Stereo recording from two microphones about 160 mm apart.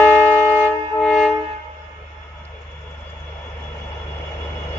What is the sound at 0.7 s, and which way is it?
Music, 5° left (ahead or behind).